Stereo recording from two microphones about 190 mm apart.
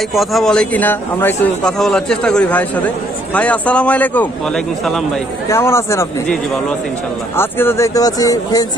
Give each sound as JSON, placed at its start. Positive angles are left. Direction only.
{"t": 0.1, "sound": "a man's voice", "side_deg": 0}
{"t": 5.5, "sound": "a man's voice", "side_deg": 15}